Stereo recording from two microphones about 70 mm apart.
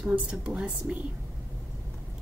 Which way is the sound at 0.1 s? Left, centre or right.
Centre.